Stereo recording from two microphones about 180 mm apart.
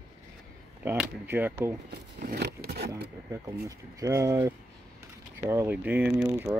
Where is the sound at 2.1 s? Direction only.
60° right (ahead or behind).